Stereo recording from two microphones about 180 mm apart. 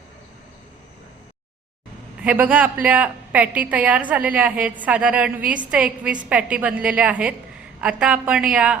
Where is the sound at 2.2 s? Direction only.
10° right (ahead or behind).